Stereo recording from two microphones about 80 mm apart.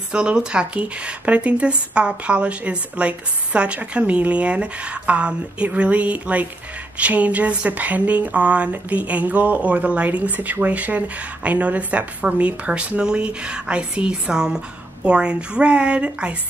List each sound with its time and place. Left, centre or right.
0.1 s speech: centre